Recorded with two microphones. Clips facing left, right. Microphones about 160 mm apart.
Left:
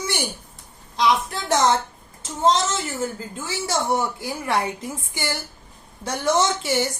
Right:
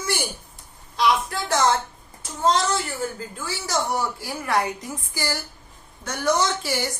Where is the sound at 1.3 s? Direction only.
20° left (ahead or behind).